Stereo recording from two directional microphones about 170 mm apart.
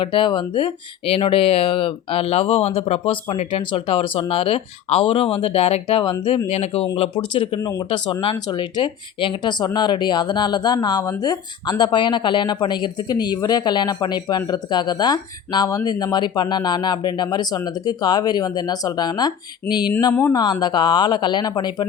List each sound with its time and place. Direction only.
0.0 s speech: 30° left (ahead or behind)